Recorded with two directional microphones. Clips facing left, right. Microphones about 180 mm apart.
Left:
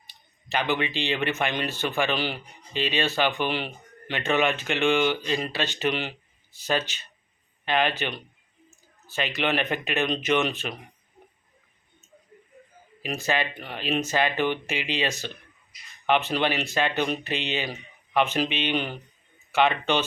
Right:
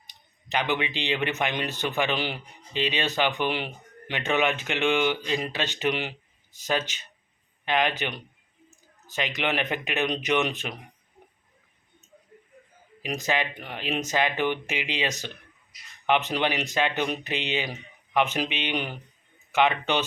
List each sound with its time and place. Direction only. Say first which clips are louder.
0.1 s speech: even; 15° right (ahead or behind)
13.0 s speech: left 1 dB; 15° right (ahead or behind)